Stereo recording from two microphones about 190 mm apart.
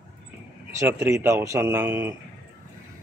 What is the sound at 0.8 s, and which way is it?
Speech, 15° right (ahead or behind).